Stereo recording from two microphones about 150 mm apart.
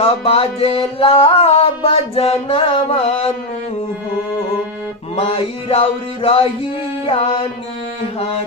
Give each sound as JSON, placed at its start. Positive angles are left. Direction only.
{"t": 0.1, "sound": "music", "side_deg": 40}
{"t": 5.2, "sound": "music", "side_deg": 40}